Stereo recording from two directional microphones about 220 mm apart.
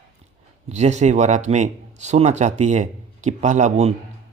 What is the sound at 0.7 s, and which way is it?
Speech, 30° right (ahead or behind).